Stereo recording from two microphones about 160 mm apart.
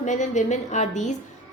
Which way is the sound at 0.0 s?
50° left (ahead or behind).